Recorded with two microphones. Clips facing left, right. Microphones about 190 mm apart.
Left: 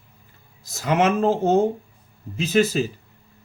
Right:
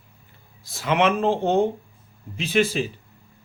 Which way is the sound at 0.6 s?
40° left (ahead or behind).